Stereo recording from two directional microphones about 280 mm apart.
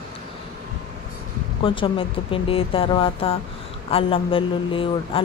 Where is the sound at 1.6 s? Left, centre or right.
Centre.